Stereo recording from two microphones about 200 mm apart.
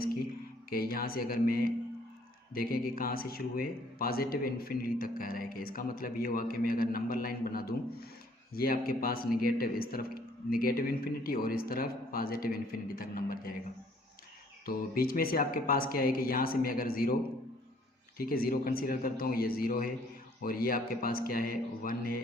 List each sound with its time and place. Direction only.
0.7 s a man's voice: 45° left (ahead or behind)
14.7 s a man's voice: 45° left (ahead or behind)
18.2 s a man's voice: 45° left (ahead or behind)